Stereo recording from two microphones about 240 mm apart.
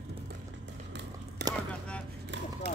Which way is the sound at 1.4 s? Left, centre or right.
Right.